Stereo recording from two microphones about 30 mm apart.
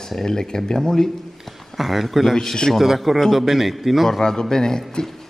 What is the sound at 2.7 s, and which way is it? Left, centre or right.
A man's voice, centre.